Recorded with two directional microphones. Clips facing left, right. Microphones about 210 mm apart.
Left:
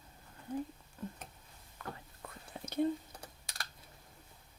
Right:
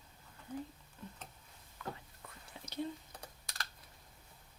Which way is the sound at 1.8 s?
50° left (ahead or behind).